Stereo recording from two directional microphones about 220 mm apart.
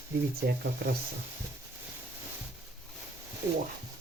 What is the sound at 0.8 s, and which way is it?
Speech, 50° right (ahead or behind).